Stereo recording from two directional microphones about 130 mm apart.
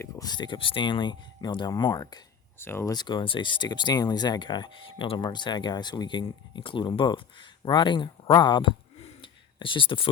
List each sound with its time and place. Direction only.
0.0 s speech: 30° left (ahead or behind)
2.6 s speech: 20° left (ahead or behind)
2.9 s speech: 35° left (ahead or behind)
9.2 s a sound: 40° left (ahead or behind)